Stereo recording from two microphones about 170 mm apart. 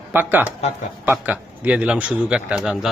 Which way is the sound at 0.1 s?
10° right (ahead or behind).